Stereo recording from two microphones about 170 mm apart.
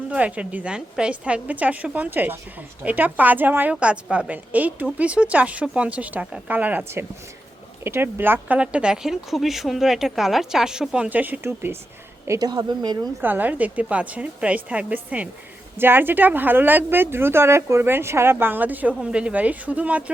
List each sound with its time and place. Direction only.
0.1 s speech: 10° right (ahead or behind)
12.3 s a woman's voice: 25° right (ahead or behind)
13.2 s speech: 10° right (ahead or behind)